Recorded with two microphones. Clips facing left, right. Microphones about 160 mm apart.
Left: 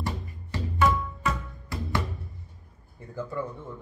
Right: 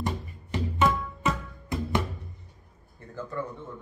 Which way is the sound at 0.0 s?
20° right (ahead or behind).